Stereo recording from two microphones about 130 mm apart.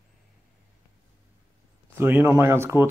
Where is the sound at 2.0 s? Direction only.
20° right (ahead or behind).